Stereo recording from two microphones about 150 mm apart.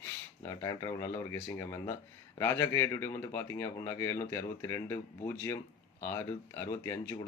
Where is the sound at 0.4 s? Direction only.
20° left (ahead or behind).